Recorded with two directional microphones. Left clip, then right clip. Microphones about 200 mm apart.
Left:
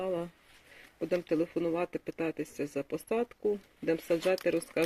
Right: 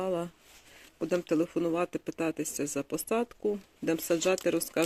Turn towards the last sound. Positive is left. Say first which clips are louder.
# right 1 dB
turn(degrees=-20)  # may be behind; listen again after turning